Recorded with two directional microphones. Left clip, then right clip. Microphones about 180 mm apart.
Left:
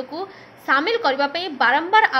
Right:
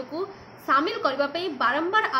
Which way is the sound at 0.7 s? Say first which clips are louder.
Left 4 dB; 35° left (ahead or behind).